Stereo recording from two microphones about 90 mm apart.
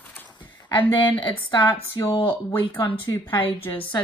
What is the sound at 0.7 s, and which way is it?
Speech, 70° left (ahead or behind).